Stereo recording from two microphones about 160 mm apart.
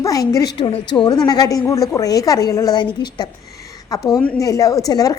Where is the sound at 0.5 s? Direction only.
30° left (ahead or behind).